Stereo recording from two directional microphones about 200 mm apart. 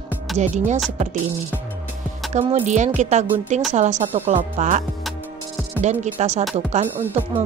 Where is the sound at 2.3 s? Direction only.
35° right (ahead or behind).